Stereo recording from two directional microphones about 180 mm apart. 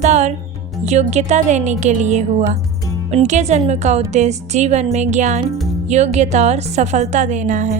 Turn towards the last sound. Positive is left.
turn(degrees=-40)  # may be behind; listen again after turning